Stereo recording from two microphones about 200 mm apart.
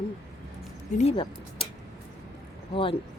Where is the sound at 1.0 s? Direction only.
30° left (ahead or behind).